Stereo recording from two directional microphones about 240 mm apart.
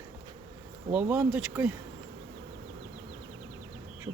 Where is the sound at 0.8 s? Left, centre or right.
Centre.